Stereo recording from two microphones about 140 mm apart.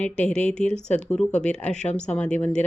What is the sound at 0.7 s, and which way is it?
Speech, 55° left (ahead or behind).